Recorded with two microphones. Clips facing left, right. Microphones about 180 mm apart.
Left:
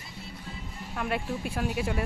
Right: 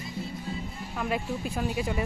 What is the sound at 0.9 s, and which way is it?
Speech, centre (ahead or behind).